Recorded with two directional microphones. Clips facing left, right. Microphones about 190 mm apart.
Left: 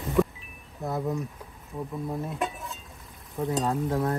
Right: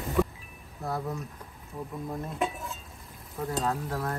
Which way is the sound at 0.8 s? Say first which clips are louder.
Left 2 dB; 20° left (ahead or behind).